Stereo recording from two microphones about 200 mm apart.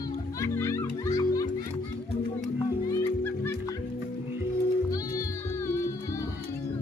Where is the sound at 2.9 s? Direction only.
10° left (ahead or behind).